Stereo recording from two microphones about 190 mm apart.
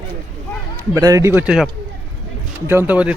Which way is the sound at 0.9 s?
15° right (ahead or behind).